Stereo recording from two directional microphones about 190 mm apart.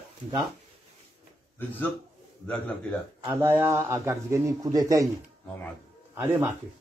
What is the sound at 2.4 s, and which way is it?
Speech, 5° left (ahead or behind).